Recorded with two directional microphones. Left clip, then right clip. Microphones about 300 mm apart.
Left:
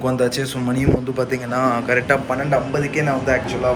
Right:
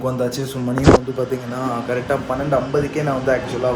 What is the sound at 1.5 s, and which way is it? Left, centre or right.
A man's voice, centre.